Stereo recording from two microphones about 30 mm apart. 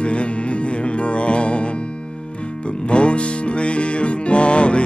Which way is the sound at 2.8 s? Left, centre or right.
Left.